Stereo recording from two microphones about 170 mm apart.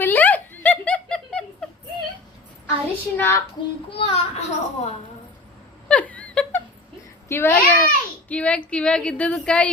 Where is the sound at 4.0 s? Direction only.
35° left (ahead or behind).